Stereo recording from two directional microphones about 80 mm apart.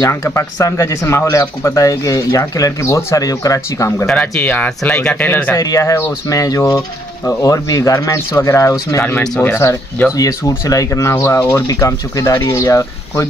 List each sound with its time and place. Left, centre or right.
0.1 s speech: left
4.2 s speech: centre
5.6 s speech: left
6.2 s speech: left
10.0 s speech: centre
10.7 s speech: left